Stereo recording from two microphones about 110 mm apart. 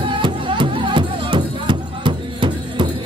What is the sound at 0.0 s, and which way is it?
Music, 50° right (ahead or behind).